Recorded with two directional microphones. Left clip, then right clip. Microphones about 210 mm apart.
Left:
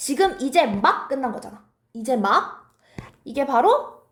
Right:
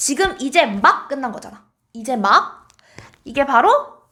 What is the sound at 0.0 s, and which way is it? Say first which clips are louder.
Speech: right 2 dB; 30° right (ahead or behind).